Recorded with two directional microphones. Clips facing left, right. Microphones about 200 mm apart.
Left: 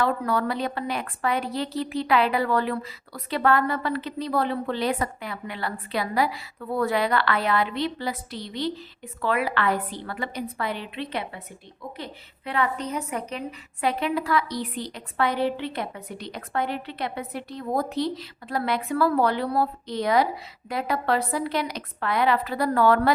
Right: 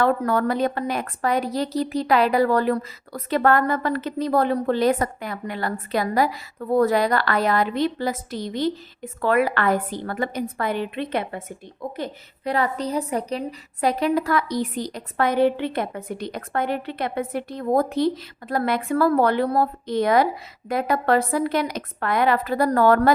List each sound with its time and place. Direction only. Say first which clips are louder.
0.0 s a woman's voice: right 4 dB; 50° right (ahead or behind)